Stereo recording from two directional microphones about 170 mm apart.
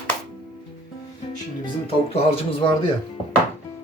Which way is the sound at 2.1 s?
35° left (ahead or behind).